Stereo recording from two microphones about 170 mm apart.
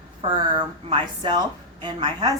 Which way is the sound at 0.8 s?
30° right (ahead or behind).